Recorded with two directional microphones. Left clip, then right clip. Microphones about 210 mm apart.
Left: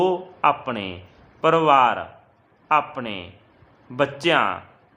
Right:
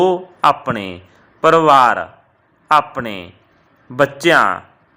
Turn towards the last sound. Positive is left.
turn(degrees=-25)  # may be behind; listen again after turning